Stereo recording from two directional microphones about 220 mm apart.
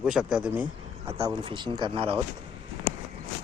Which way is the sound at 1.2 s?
20° right (ahead or behind).